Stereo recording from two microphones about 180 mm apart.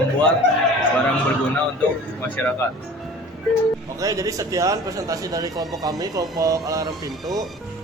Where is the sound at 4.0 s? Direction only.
20° right (ahead or behind).